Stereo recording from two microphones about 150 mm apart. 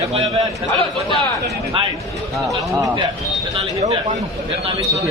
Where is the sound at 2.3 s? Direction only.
Centre (ahead or behind).